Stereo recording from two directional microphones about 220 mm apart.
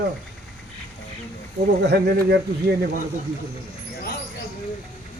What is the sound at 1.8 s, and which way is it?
Speech, 50° right (ahead or behind).